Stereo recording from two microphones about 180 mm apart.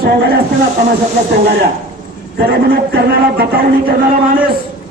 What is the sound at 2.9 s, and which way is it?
A man's voice, 60° right (ahead or behind).